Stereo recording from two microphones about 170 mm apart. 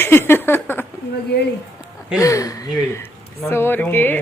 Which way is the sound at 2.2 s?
20° left (ahead or behind).